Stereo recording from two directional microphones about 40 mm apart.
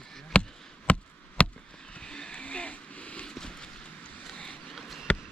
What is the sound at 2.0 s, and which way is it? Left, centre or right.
Vehicle, left.